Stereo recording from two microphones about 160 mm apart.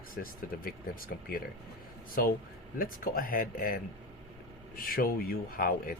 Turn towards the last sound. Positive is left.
turn(degrees=65)  # may be behind; listen again after turning